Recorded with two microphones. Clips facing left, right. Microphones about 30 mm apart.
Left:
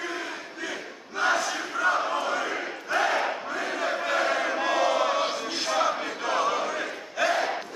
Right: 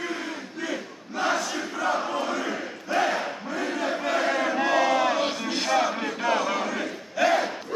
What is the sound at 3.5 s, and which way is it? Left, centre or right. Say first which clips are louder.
Crowd: right 1 dB; centre.